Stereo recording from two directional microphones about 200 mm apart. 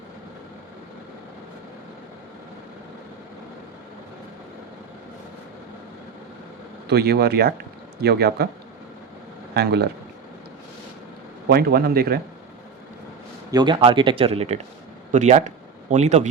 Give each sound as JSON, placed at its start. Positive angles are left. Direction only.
{"t": 6.8, "sound": "a man's voice", "side_deg": -55}
{"t": 9.6, "sound": "speech", "side_deg": -55}
{"t": 11.4, "sound": "a man's voice", "side_deg": -50}
{"t": 13.5, "sound": "speech", "side_deg": -20}